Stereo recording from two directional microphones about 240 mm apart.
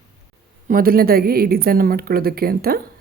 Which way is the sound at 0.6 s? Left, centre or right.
Right.